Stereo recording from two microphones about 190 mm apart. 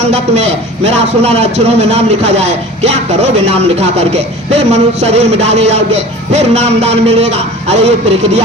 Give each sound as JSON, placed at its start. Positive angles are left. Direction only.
{"t": 0.0, "sound": "a man's voice", "side_deg": -35}